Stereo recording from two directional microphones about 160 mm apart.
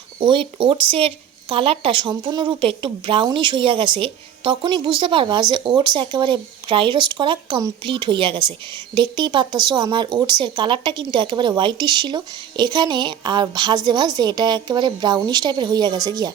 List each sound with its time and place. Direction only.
0.2 s speech: 30° right (ahead or behind)